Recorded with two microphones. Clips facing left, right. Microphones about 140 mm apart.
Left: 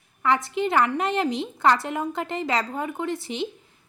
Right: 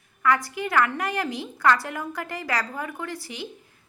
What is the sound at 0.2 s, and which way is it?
A woman's voice, 25° left (ahead or behind).